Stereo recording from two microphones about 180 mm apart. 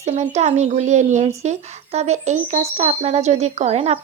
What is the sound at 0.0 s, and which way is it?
Speech, 40° right (ahead or behind).